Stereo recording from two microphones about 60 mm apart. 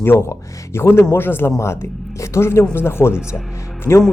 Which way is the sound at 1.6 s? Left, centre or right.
Left.